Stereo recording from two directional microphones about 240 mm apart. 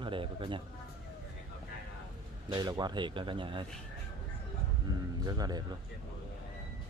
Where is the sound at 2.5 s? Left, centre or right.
Centre.